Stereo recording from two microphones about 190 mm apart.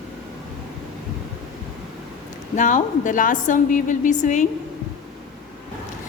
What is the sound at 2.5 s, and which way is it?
A woman's voice, 40° left (ahead or behind).